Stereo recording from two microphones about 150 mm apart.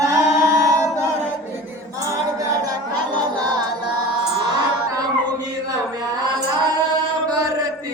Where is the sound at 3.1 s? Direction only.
30° right (ahead or behind).